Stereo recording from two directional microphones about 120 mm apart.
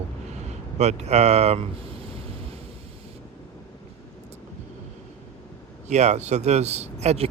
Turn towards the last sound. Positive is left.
turn(degrees=-60)  # may be behind; listen again after turning